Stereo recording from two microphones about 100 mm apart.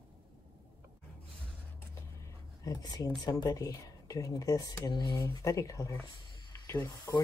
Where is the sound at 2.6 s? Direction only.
40° left (ahead or behind).